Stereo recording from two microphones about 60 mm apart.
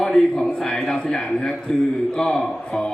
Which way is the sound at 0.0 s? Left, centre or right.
Centre.